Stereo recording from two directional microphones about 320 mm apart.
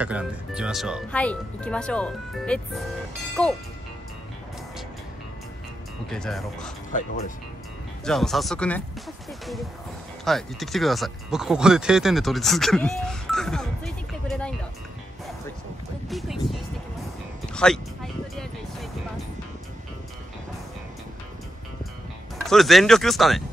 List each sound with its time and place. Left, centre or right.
0.0 s speech: centre
6.0 s speech: centre
6.9 s speech: left
8.0 s speech: centre
10.2 s speech: centre
16.1 s speech: centre
18.3 s music: centre
22.4 s speech: centre